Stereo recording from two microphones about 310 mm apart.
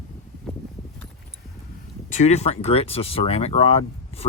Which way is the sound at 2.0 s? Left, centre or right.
Left.